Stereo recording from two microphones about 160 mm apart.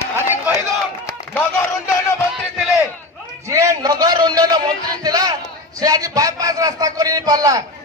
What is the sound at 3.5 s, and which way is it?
A man's voice, 20° right (ahead or behind).